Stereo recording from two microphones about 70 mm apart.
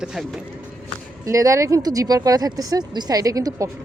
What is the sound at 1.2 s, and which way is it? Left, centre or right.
A woman's voice, right.